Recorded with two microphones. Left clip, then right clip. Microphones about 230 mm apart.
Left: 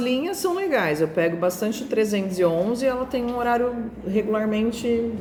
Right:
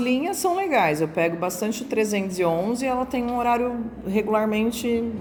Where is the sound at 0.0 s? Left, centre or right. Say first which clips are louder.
Right 1 dB; right.